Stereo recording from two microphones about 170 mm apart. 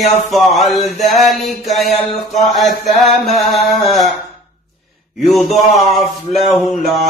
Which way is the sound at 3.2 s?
Centre (ahead or behind).